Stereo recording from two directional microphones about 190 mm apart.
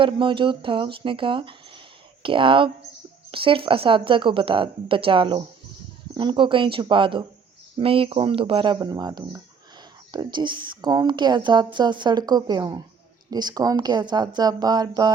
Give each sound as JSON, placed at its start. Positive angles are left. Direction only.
{"t": 0.0, "sound": "a woman's voice", "side_deg": -25}